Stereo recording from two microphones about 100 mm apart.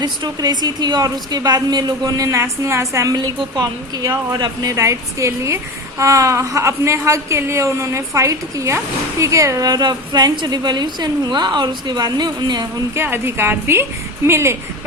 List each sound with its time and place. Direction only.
0.0 s a woman's voice: 45° right (ahead or behind)
13.0 s a woman's voice: 25° right (ahead or behind)